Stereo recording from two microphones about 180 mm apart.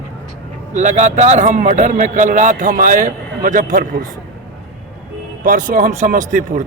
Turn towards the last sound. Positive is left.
turn(degrees=-45)  # may be behind; listen again after turning